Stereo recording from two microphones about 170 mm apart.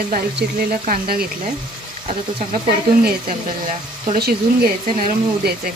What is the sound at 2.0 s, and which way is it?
Speech, 45° right (ahead or behind).